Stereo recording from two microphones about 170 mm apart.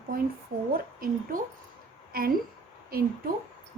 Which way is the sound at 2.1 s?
60° right (ahead or behind).